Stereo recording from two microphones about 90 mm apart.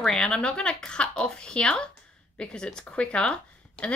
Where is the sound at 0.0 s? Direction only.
5° left (ahead or behind).